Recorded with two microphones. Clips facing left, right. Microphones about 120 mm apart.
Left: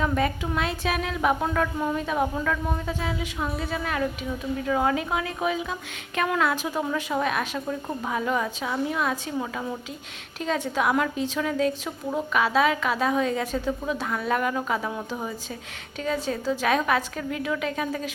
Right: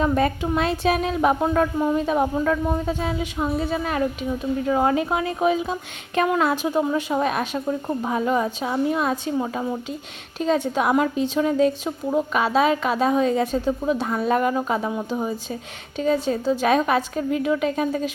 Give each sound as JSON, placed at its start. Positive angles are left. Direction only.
{"t": 0.0, "sound": "a woman's voice", "side_deg": -30}
{"t": 10.8, "sound": "a woman's voice", "side_deg": -25}